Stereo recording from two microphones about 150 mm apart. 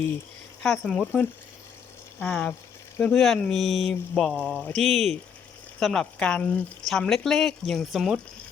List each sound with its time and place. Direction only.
0.6 s speech: 5° left (ahead or behind)
1.0 s speech: 15° left (ahead or behind)